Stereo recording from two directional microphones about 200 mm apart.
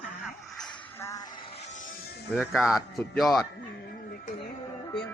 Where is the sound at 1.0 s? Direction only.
15° left (ahead or behind).